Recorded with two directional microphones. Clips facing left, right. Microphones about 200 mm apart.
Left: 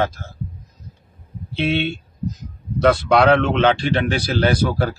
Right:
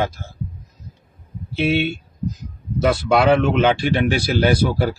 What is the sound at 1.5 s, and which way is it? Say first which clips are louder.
Speech: right 1 dB; 5° right (ahead or behind).